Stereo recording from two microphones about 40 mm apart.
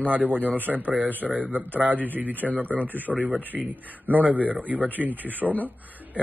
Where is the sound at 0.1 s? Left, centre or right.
Right.